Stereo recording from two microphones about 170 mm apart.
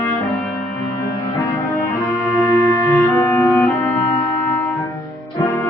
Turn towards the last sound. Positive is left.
turn(degrees=15)  # may be behind; listen again after turning